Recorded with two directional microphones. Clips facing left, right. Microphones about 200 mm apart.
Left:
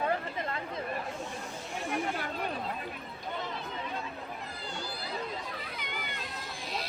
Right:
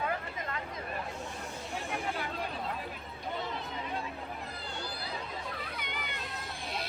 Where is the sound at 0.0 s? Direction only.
35° left (ahead or behind).